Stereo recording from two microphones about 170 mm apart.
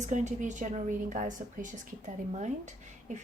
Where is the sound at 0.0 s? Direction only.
45° right (ahead or behind).